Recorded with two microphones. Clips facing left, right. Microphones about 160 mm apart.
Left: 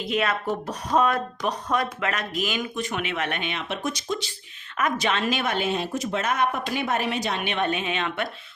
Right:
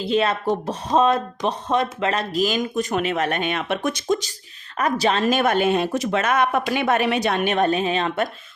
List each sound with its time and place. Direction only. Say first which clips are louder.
0.0 s speech: right 5 dB; 30° right (ahead or behind)